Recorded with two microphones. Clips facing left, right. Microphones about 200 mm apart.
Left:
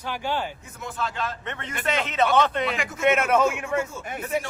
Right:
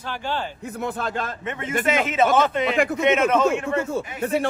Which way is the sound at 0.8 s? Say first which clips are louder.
Right 3 dB; 55° right (ahead or behind).